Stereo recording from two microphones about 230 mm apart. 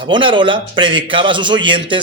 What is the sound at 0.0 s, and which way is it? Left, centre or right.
Speech, right.